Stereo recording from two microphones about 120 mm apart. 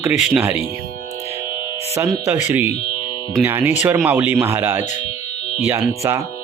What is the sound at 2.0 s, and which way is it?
Speech, 20° right (ahead or behind).